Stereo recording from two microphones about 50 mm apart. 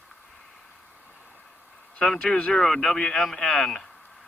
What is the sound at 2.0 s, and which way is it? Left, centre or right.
Speech, centre.